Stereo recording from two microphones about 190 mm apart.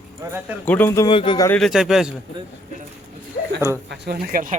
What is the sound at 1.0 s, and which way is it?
Speech, 25° left (ahead or behind).